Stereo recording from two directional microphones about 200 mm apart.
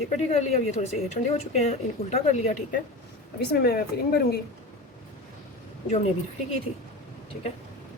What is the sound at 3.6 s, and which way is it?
Speech, 50° left (ahead or behind).